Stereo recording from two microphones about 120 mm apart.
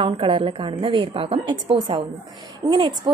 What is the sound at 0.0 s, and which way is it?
A woman's voice, 45° right (ahead or behind).